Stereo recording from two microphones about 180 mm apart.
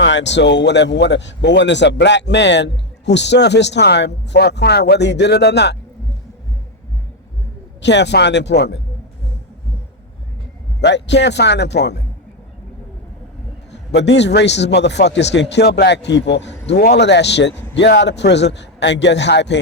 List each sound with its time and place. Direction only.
0.0 s a man's voice: 80° left
7.8 s a man's voice: 75° left (ahead or behind)
10.8 s a man's voice: 75° left (ahead or behind)
13.9 s a man's voice: 75° left (ahead or behind)